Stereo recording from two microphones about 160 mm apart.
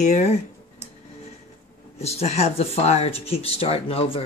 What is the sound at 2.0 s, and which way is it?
Speech, 40° left (ahead or behind).